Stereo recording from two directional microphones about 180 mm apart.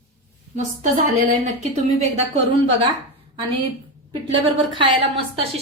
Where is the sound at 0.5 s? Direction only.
45° right (ahead or behind).